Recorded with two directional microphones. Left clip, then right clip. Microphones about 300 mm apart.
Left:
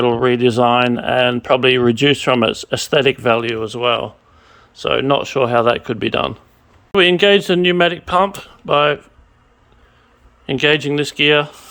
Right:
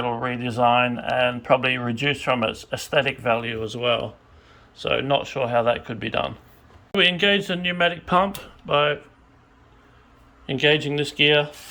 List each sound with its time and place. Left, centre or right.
0.0 s speech: left
10.4 s speech: centre